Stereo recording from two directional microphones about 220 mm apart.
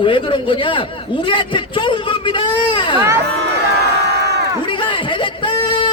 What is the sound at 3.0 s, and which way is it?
Speech, 15° right (ahead or behind).